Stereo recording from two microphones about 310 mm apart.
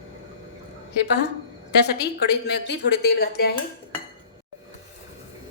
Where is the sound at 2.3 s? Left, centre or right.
Left.